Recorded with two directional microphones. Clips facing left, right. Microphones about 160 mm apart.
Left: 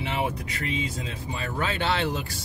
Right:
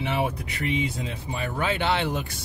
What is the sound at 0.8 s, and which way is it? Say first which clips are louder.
Speech: right 3 dB; 20° right (ahead or behind).